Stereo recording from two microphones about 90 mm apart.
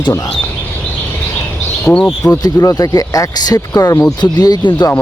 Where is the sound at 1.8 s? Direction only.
10° left (ahead or behind).